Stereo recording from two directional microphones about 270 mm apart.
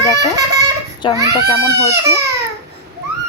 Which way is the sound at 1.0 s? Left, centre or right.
Centre.